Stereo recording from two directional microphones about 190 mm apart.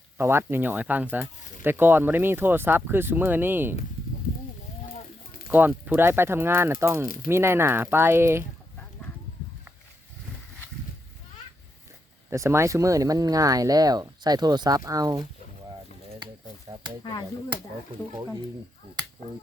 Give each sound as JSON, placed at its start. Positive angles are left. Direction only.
{"t": 0.2, "sound": "speech", "side_deg": -10}
{"t": 5.5, "sound": "speech", "side_deg": -10}
{"t": 12.3, "sound": "speech", "side_deg": -15}